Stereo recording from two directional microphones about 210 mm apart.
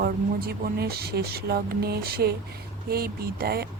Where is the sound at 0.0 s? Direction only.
45° right (ahead or behind).